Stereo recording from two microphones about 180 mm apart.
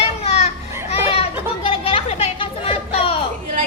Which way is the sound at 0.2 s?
35° left (ahead or behind).